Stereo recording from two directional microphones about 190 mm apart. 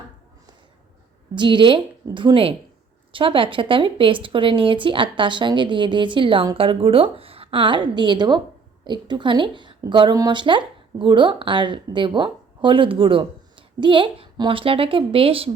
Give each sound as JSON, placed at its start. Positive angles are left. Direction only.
{"t": 1.4, "sound": "a woman's voice", "side_deg": -25}